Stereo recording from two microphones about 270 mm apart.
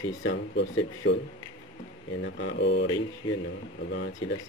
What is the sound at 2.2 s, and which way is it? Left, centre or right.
Speech, left.